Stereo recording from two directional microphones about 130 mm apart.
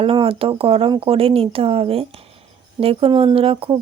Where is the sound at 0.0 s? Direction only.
45° right (ahead or behind).